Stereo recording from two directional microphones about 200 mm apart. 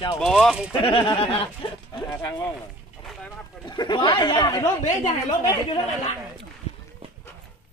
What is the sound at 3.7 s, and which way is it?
Speech, 20° left (ahead or behind).